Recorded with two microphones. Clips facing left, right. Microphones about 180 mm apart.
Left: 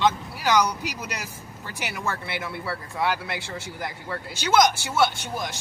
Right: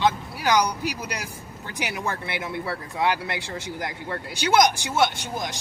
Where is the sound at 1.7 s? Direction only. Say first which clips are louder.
Right 2 dB; 15° right (ahead or behind).